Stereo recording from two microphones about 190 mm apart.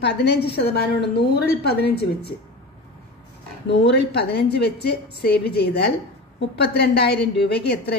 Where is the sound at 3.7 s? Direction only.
65° left (ahead or behind).